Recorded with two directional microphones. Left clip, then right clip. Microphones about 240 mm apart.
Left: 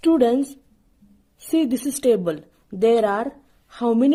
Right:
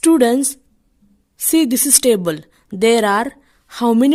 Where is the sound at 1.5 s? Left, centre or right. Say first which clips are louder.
Right 6 dB; right.